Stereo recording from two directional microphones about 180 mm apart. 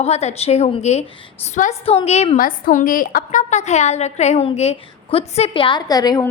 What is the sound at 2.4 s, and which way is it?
A woman's voice, 50° left (ahead or behind).